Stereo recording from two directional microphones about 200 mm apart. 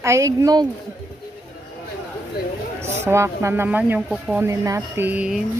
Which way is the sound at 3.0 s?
15° right (ahead or behind).